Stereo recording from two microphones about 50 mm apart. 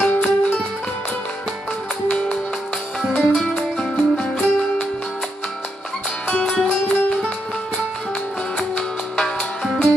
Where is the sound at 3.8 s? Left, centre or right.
Centre.